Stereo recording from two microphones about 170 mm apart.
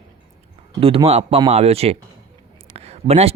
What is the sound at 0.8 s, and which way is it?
Speech, 35° right (ahead or behind).